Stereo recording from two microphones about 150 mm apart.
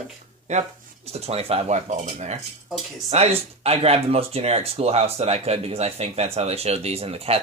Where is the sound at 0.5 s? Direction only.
50° right (ahead or behind).